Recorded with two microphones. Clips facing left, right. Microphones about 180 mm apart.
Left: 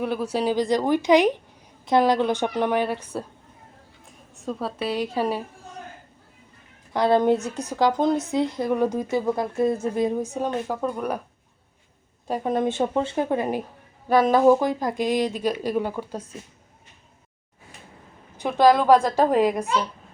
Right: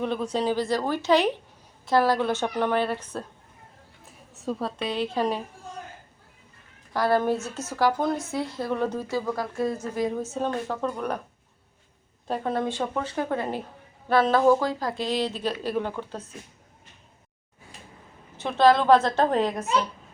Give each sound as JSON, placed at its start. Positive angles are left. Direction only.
{"t": 0.0, "sound": "speech", "side_deg": 5}
{"t": 4.0, "sound": "speech", "side_deg": 0}
{"t": 6.9, "sound": "speech", "side_deg": 20}
{"t": 12.3, "sound": "speech", "side_deg": 15}
{"t": 18.3, "sound": "speech", "side_deg": 15}